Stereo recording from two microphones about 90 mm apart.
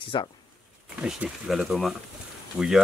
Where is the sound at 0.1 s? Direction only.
55° left (ahead or behind).